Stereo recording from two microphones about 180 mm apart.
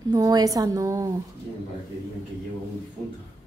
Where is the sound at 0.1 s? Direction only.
20° right (ahead or behind).